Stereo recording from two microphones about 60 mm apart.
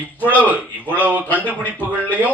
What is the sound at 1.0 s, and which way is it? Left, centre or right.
Speech, right.